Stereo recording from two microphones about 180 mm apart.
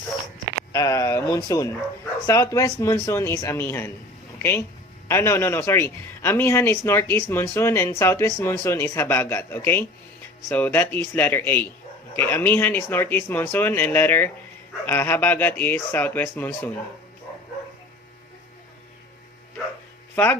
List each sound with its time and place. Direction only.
0.7 s speech: 15° left (ahead or behind)
5.0 s speech: 15° left (ahead or behind)
20.1 s speech: 10° left (ahead or behind)